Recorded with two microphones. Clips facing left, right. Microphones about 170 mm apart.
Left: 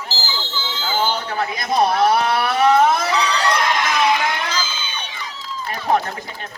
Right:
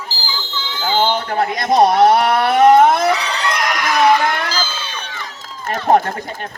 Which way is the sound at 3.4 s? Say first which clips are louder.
Left 1 dB; 30° left (ahead or behind).